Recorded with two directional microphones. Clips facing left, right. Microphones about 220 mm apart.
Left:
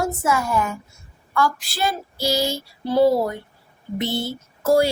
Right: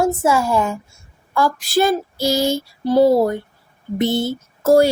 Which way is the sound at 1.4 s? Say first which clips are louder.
Right 6 dB; 45° right (ahead or behind).